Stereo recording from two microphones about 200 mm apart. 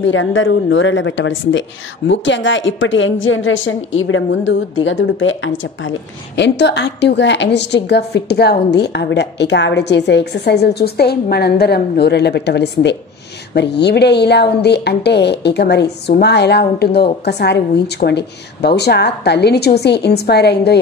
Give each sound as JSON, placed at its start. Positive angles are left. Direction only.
{"t": 0.0, "sound": "a woman's voice", "side_deg": 70}